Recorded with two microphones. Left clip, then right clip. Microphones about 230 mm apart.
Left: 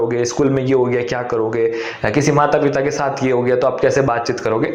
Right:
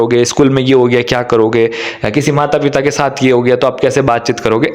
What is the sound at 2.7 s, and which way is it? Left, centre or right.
A man's voice, right.